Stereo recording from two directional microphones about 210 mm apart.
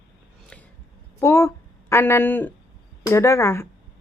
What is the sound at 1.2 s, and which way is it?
A woman's voice, 15° left (ahead or behind).